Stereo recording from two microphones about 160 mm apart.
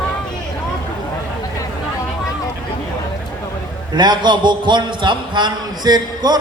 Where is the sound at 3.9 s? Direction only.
25° right (ahead or behind).